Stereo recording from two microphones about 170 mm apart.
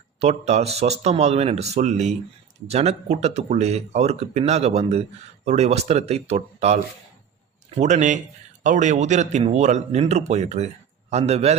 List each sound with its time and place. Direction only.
0.2 s speech: 40° right (ahead or behind)